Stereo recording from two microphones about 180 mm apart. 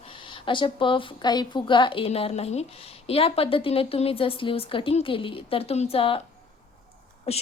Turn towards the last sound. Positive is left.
turn(degrees=35)  # may be behind; listen again after turning